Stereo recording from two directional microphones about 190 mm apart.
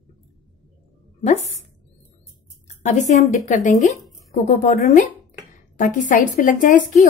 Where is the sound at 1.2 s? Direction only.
35° left (ahead or behind).